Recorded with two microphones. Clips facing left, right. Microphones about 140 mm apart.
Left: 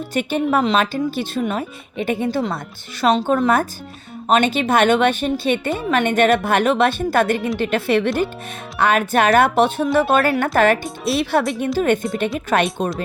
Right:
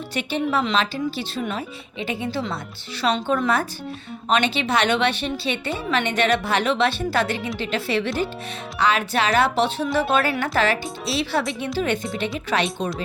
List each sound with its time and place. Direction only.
0.1 s speech: 50° left (ahead or behind)